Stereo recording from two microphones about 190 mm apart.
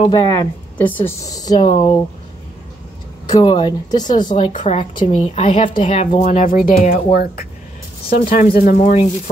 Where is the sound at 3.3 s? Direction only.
20° left (ahead or behind).